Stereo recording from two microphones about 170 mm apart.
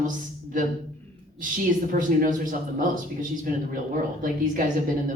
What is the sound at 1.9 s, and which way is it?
A man's voice, 50° right (ahead or behind).